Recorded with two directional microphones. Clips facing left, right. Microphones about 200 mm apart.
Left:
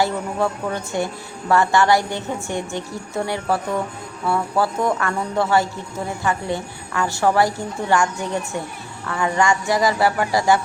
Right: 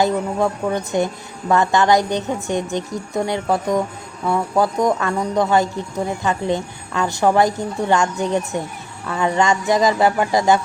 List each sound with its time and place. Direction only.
0.0 s speech: 15° right (ahead or behind)